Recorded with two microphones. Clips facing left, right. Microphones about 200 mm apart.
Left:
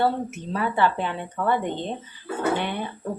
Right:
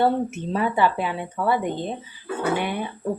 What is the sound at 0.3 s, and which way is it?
Speech, 25° right (ahead or behind).